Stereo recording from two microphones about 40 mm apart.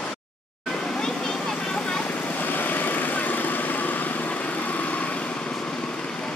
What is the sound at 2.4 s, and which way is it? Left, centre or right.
Vehicle, left.